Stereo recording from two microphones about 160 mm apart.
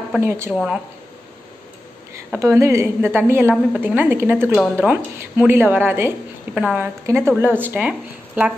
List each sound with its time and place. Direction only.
0.2 s a woman's voice: 15° right (ahead or behind)
2.1 s a woman's voice: 15° right (ahead or behind)